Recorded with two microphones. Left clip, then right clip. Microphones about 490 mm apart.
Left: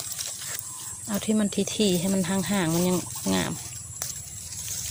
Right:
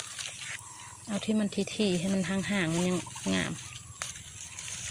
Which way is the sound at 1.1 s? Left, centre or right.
Right.